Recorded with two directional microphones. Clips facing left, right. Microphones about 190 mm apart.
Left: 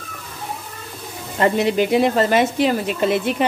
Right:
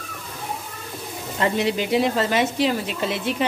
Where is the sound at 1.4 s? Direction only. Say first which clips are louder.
Left 5 dB; 50° left (ahead or behind).